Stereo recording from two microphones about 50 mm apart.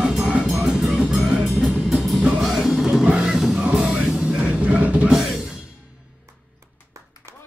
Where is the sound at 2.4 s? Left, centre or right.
Centre.